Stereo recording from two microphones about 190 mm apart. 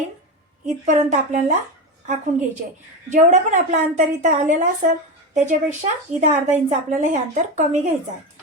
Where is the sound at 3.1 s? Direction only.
40° right (ahead or behind).